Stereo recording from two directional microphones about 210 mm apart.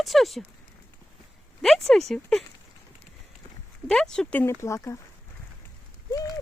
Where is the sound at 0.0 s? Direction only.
Centre (ahead or behind).